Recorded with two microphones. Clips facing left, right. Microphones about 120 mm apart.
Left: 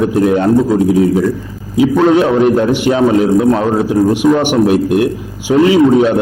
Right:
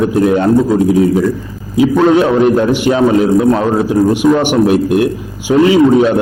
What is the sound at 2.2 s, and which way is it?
Speech, 25° right (ahead or behind).